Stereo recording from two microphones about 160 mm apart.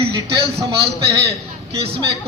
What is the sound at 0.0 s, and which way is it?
Speech, 35° right (ahead or behind).